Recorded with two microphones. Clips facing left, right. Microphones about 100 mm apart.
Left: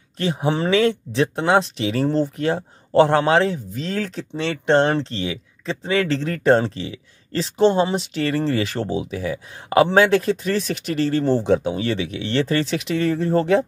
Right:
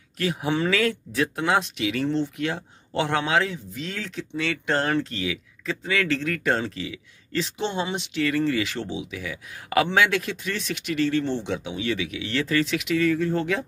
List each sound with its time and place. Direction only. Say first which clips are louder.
0.2 s speech: left 3 dB; 30° left (ahead or behind)